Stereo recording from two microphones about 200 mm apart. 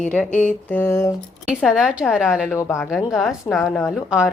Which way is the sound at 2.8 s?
Centre (ahead or behind).